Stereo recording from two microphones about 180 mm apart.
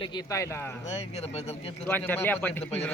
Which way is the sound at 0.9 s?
35° left (ahead or behind).